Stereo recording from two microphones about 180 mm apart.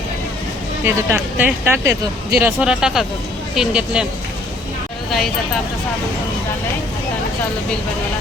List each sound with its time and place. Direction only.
0.9 s speech: 10° right (ahead or behind)